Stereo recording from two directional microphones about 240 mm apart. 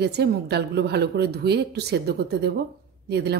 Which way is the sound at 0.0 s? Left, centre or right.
Right.